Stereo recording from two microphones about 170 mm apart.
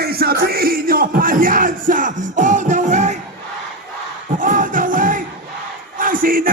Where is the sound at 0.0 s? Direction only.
65° right (ahead or behind); by 3.2 s 45° right (ahead or behind).